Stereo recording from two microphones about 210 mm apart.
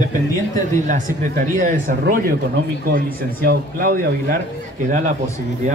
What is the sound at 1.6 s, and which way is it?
Speech, 40° right (ahead or behind).